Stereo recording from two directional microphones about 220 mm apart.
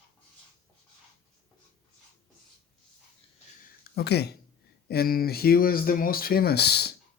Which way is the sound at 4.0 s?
50° left (ahead or behind).